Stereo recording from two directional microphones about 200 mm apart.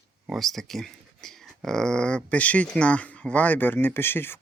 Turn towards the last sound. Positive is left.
turn(degrees=10)  # may be behind; listen again after turning